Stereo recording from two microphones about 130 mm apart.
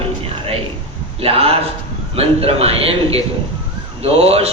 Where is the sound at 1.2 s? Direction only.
50° right (ahead or behind).